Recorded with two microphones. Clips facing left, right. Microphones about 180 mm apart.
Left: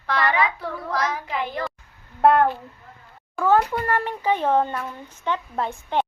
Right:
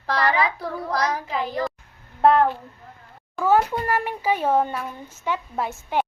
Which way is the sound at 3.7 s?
15° right (ahead or behind).